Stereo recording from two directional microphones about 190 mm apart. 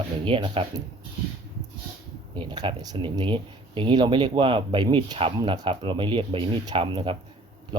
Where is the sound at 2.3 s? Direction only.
25° right (ahead or behind).